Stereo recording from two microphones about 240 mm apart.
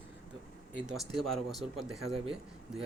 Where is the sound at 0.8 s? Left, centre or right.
Centre.